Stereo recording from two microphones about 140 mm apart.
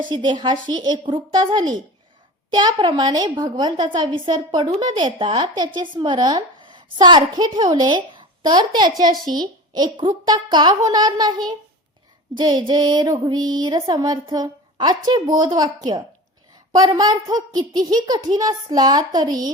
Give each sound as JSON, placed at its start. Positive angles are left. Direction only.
{"t": 0.0, "sound": "a child's voice", "side_deg": -35}